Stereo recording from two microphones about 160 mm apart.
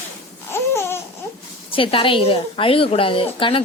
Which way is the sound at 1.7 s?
35° left (ahead or behind).